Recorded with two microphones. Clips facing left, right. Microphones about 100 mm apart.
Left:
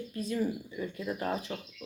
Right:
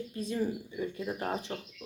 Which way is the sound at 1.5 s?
35° right (ahead or behind).